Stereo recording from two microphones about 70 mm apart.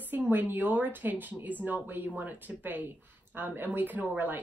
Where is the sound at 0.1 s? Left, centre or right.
Right.